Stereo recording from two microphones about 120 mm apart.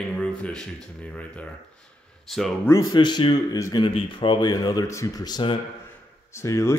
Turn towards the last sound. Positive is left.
turn(degrees=25)  # may be behind; listen again after turning